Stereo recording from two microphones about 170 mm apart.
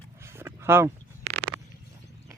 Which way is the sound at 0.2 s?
15° right (ahead or behind).